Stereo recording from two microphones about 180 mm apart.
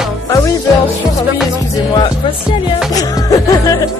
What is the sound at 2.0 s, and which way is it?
Music, 30° left (ahead or behind).